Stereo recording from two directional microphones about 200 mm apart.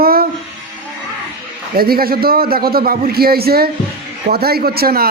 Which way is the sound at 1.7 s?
50° right (ahead or behind).